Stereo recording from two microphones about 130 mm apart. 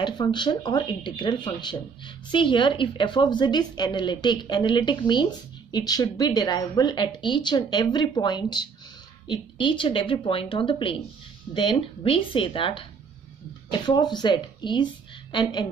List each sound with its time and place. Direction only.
0.0 s speech: 35° left (ahead or behind)